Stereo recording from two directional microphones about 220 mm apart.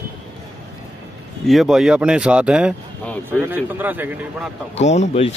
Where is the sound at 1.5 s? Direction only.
Centre (ahead or behind).